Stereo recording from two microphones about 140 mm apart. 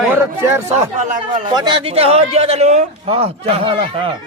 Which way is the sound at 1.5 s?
35° right (ahead or behind).